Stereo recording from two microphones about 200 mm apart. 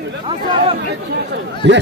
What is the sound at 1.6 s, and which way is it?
Speech, 60° right (ahead or behind).